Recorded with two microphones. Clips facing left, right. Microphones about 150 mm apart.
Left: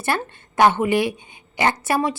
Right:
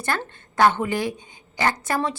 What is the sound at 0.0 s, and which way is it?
A woman's voice, 20° left (ahead or behind).